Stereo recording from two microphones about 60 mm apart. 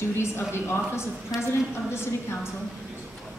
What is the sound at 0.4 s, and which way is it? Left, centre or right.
Speech, left.